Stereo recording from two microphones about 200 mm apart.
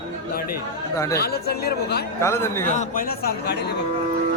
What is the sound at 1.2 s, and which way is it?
Speech, 50° left (ahead or behind).